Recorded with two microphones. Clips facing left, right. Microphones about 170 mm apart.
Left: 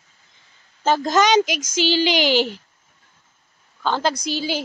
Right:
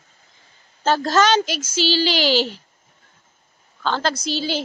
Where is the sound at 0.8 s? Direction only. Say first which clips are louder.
Even; 15° left (ahead or behind).